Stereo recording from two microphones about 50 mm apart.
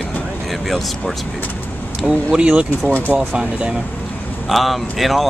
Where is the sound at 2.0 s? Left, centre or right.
Right.